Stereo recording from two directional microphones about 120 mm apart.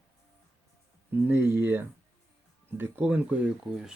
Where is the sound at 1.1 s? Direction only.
20° right (ahead or behind).